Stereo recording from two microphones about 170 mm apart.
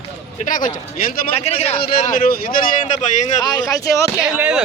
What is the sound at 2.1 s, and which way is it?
Speech, 60° left (ahead or behind).